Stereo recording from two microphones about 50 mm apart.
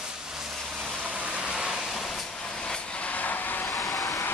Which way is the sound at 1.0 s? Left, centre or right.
Right.